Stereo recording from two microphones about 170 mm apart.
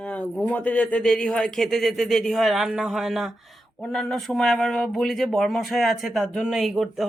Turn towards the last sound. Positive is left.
turn(degrees=0)  # may be behind; listen again after turning